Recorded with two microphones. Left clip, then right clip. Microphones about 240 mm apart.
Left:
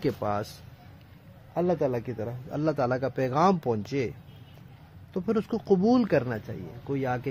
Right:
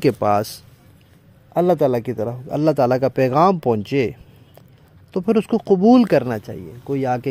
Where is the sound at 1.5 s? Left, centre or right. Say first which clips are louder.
Right 10 dB; right.